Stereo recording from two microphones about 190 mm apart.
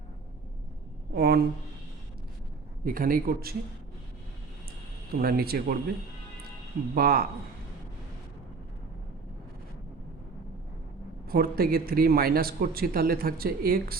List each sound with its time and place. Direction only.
1.1 s a sound: 55° right (ahead or behind)
2.8 s a man's voice: 50° right (ahead or behind)
5.1 s a man's voice: 55° right (ahead or behind)
6.9 s a man's voice: 50° right (ahead or behind)
11.3 s a man's voice: 50° right (ahead or behind)